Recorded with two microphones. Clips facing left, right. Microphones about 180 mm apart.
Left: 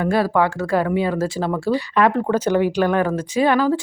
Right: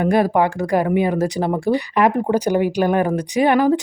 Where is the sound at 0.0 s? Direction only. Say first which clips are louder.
Right 2 dB; 20° right (ahead or behind).